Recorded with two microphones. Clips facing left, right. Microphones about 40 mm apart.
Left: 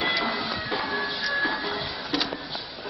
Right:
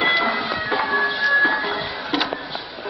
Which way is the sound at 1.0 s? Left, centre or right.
Right.